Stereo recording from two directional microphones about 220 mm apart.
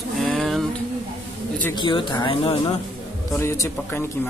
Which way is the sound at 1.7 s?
20° left (ahead or behind).